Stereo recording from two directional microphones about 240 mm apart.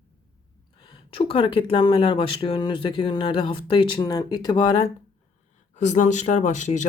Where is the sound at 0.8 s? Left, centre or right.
Left.